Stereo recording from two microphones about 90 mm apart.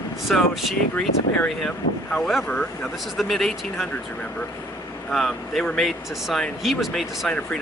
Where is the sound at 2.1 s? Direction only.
10° left (ahead or behind).